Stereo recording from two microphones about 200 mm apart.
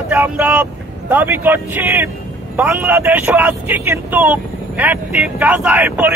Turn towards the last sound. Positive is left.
turn(degrees=-10)  # may be behind; listen again after turning